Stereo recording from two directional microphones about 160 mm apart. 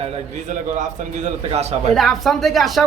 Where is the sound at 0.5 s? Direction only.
50° right (ahead or behind).